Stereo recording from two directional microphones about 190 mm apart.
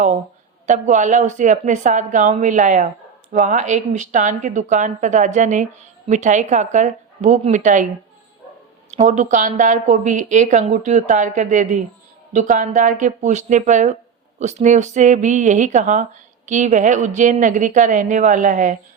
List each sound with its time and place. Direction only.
0.7 s a woman's voice: 40° right (ahead or behind)
8.9 s a woman's voice: 40° right (ahead or behind)